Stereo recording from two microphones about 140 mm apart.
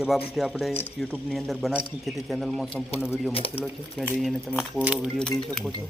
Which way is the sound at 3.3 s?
40° left (ahead or behind).